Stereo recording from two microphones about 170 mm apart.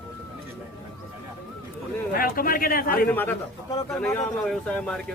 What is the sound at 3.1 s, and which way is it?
A man's voice, 10° left (ahead or behind).